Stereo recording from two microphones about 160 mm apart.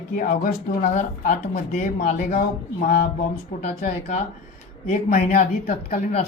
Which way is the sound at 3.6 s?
45° left (ahead or behind).